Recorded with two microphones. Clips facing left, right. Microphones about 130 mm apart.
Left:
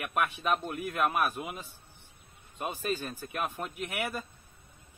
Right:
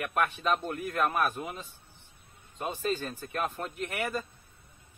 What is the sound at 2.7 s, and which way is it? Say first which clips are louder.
Speech: right 3 dB; 10° left (ahead or behind).